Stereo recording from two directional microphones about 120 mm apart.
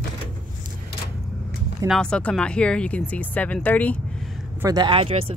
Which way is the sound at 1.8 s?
5° left (ahead or behind).